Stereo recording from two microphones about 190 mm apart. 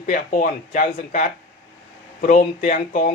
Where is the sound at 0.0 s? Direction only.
45° left (ahead or behind).